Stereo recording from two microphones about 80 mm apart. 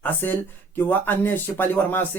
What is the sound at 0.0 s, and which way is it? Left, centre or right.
Speech, left.